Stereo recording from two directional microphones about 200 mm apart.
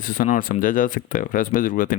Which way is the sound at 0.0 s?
45° left (ahead or behind).